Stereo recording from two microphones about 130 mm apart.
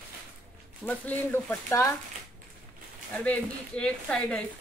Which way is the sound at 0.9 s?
10° left (ahead or behind).